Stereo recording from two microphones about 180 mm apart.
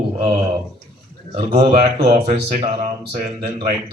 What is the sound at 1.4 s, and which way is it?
Speech, 35° right (ahead or behind).